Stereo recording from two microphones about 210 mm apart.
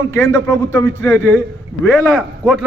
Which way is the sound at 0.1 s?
15° left (ahead or behind).